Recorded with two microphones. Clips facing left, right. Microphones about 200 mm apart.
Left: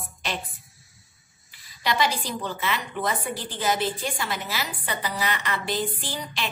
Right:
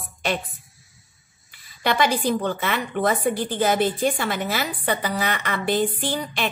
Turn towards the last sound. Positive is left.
turn(degrees=-55)  # may be behind; listen again after turning